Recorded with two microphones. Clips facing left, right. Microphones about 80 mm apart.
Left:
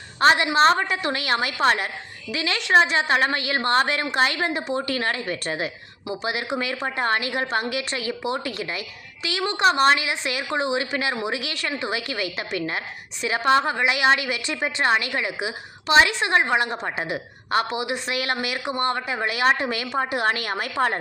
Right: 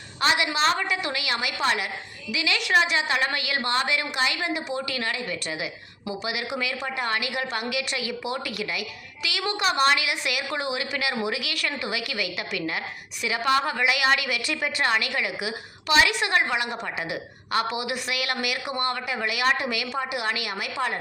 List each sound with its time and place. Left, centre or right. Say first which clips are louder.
0.2 s a woman's voice: left 6 dB; left